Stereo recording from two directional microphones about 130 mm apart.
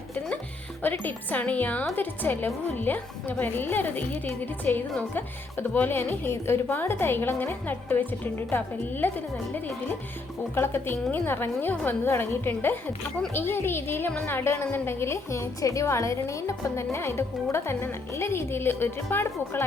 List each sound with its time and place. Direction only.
0.8 s a woman's voice: 15° left (ahead or behind)
10.5 s a woman's voice: 20° left (ahead or behind)